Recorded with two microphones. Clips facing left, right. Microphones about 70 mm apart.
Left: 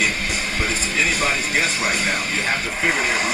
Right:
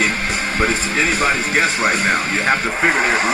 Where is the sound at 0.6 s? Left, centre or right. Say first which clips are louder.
Right 5 dB; right.